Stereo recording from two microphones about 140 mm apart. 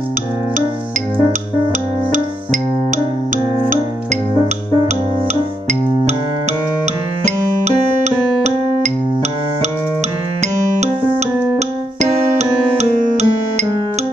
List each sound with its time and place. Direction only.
1.7 s music: 65° right (ahead or behind)
4.8 s music: 55° right (ahead or behind)
7.2 s music: 55° right (ahead or behind)
10.4 s keyboard: 55° right (ahead or behind)